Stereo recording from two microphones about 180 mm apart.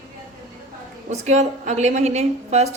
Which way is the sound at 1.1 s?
40° right (ahead or behind).